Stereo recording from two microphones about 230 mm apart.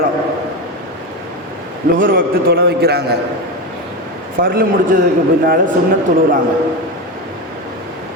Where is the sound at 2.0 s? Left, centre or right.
Right.